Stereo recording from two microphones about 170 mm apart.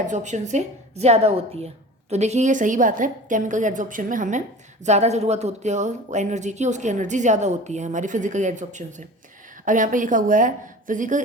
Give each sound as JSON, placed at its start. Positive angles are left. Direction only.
{"t": 0.0, "sound": "a woman's voice", "side_deg": -45}